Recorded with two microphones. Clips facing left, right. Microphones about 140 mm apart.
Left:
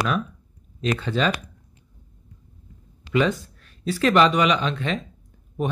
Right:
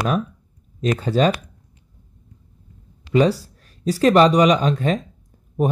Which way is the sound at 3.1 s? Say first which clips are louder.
Right 5 dB; 35° right (ahead or behind).